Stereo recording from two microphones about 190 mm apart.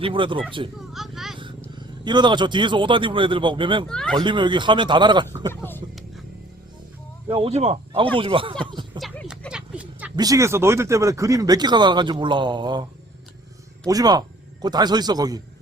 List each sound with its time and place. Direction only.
0.0 s speech: 25° right (ahead or behind)
0.9 s speech: centre (ahead or behind)
2.0 s speech: 25° right (ahead or behind)
3.8 s speech: 5° left (ahead or behind)
4.2 s speech: 25° right (ahead or behind)
7.3 s speech: 30° right (ahead or behind)
8.6 s a sound: 25° right (ahead or behind)
9.0 s a sound: centre (ahead or behind)
10.2 s speech: 15° right (ahead or behind)
13.8 s speech: 20° right (ahead or behind)